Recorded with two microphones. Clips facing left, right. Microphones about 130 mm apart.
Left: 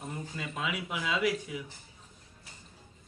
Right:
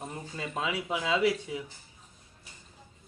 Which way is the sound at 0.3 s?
30° right (ahead or behind).